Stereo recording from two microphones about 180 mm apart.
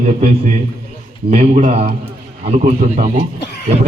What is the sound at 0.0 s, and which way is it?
A man's voice, 40° right (ahead or behind).